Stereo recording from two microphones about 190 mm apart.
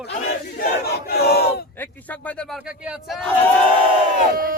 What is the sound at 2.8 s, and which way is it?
Battle cry, centre (ahead or behind).